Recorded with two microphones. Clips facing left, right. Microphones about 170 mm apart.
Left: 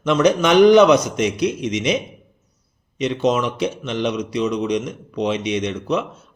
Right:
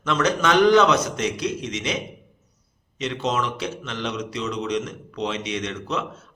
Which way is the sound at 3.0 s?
15° left (ahead or behind).